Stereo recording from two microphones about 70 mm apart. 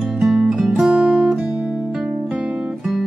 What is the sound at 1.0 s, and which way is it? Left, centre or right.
Music, centre.